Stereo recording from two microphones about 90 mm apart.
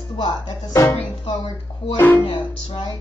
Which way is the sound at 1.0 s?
60° left (ahead or behind).